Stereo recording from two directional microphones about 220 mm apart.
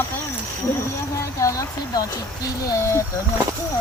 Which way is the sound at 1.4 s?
15° left (ahead or behind).